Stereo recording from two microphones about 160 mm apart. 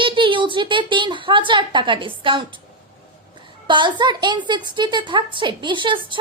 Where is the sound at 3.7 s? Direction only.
30° right (ahead or behind).